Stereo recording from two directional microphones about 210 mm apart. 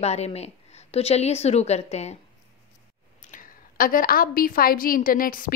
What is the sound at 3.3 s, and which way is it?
A woman's voice, 40° left (ahead or behind).